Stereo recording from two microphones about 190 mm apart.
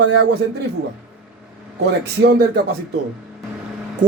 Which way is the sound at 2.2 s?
60° right (ahead or behind).